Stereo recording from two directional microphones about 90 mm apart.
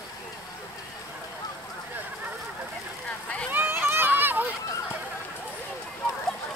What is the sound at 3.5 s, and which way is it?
Run, 25° right (ahead or behind).